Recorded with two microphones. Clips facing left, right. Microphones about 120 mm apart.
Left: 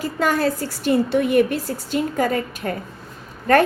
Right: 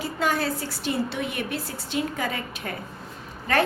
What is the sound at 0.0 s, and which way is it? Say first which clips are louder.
A woman's voice: left 5 dB; 45° left (ahead or behind).